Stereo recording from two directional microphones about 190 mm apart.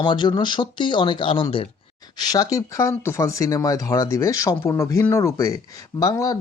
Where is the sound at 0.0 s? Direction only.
25° left (ahead or behind).